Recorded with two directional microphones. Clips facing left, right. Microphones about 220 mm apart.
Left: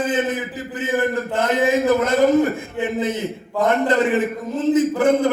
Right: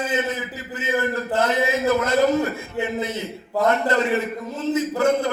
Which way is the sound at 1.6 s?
15° left (ahead or behind).